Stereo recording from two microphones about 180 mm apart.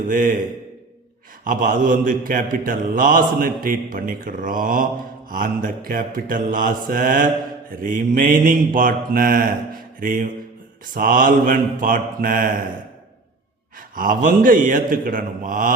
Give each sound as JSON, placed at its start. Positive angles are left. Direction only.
{"t": 0.1, "sound": "a man's voice", "side_deg": -50}
{"t": 1.5, "sound": "a man's voice", "side_deg": -50}
{"t": 13.7, "sound": "a man's voice", "side_deg": -50}